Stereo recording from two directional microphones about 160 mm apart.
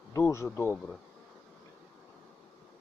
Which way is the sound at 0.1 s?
20° left (ahead or behind).